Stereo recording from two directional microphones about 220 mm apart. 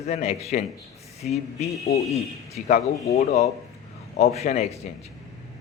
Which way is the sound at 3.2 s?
30° left (ahead or behind).